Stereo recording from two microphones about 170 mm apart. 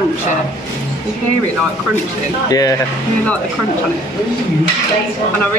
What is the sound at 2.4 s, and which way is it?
Speech, 20° left (ahead or behind).